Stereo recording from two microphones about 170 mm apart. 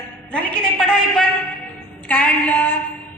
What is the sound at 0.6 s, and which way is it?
A man's voice, 5° left (ahead or behind).